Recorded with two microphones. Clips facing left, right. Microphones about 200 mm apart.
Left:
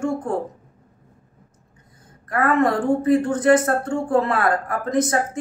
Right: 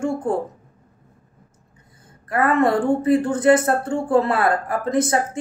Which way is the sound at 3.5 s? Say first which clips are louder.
Even; 30° right (ahead or behind).